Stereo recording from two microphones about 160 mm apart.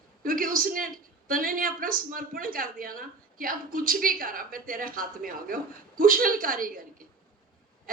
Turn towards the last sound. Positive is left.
turn(degrees=-60)  # may be behind; listen again after turning